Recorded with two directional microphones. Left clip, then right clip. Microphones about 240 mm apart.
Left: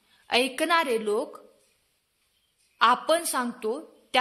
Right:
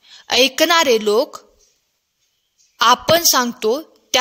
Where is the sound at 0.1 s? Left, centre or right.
Right.